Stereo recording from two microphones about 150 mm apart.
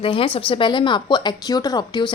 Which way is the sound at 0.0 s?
35° left (ahead or behind).